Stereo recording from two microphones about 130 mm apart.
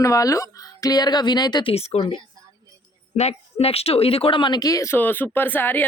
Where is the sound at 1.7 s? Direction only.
50° left (ahead or behind).